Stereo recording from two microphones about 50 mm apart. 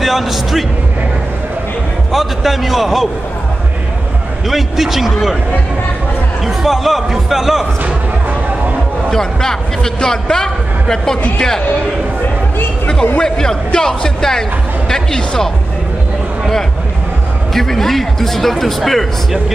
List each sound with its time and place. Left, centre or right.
0.0 s speech: centre
2.1 s speech: centre
4.5 s speech: centre
6.4 s speech: centre
9.1 s a man's voice: centre
13.2 s a man's voice: centre
17.6 s speech: centre